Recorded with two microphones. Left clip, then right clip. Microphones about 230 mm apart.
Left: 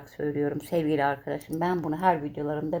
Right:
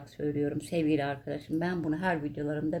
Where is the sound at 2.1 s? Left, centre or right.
Left.